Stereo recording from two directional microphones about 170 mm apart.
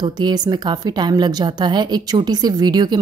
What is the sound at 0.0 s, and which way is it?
A woman's voice, 25° right (ahead or behind).